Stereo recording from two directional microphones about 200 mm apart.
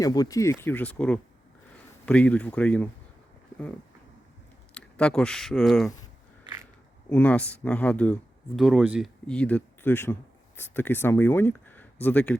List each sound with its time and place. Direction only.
0.0 s speech: 20° left (ahead or behind)
4.7 s speech: 5° left (ahead or behind)
7.1 s speech: 5° left (ahead or behind)
9.2 s speech: 5° left (ahead or behind)